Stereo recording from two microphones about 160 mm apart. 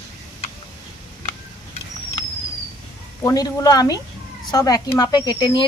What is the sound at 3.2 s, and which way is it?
Speech, 20° left (ahead or behind).